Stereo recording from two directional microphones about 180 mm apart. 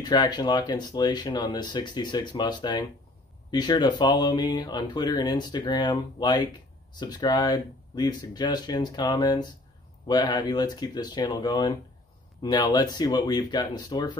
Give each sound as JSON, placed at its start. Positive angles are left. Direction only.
{"t": 0.0, "sound": "speech", "side_deg": 25}